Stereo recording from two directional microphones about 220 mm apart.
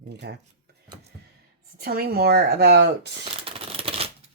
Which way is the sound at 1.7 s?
45° right (ahead or behind).